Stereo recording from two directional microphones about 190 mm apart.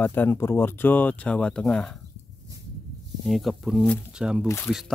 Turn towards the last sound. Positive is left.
turn(degrees=0)  # may be behind; listen again after turning